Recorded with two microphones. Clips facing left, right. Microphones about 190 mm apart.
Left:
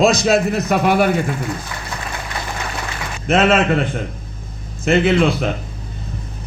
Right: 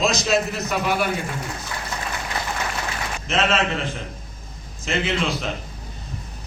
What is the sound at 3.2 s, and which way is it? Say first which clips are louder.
A man's voice: left 8 dB; 55° left (ahead or behind).